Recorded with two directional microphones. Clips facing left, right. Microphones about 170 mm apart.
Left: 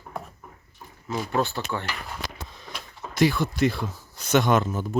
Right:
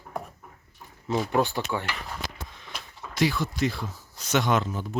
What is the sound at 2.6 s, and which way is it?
Speech, 45° left (ahead or behind).